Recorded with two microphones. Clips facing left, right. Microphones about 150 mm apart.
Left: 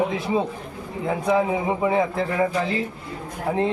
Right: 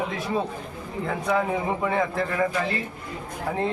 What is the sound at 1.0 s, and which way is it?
A man's voice, 15° left (ahead or behind).